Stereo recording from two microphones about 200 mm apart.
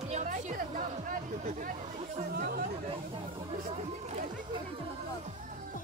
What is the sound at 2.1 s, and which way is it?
Chatter, 45° right (ahead or behind).